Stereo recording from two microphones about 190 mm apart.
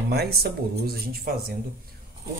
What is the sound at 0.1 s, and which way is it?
Speech, 55° right (ahead or behind).